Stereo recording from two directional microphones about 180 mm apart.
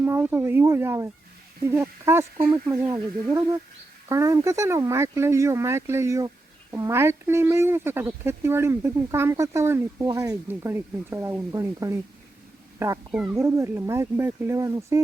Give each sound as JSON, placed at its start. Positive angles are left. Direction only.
{"t": 0.0, "sound": "speech", "side_deg": -10}